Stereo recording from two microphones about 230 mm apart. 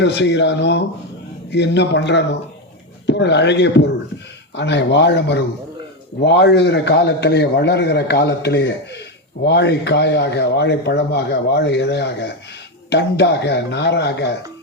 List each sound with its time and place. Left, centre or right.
0.0 s speech: left